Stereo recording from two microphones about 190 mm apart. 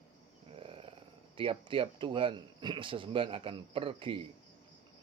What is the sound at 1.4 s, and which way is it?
Speech, 25° right (ahead or behind).